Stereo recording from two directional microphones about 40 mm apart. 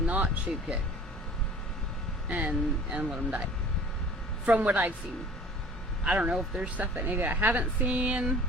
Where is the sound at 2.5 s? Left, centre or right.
Right.